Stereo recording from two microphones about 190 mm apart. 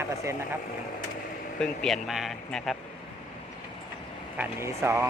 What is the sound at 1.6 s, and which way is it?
Speech, 5° left (ahead or behind).